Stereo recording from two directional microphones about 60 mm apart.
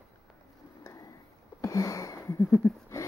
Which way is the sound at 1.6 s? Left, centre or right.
Left.